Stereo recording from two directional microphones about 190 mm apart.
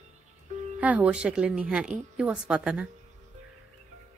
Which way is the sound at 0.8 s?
5° right (ahead or behind).